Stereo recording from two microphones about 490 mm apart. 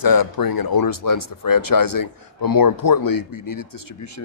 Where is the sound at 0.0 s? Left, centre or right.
Left.